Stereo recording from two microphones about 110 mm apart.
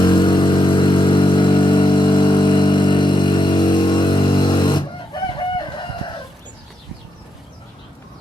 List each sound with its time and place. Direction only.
0.0 s vehicle: 45° left (ahead or behind)